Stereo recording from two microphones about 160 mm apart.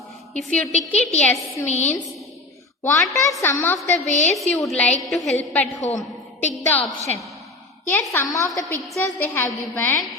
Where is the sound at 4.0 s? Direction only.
45° left (ahead or behind).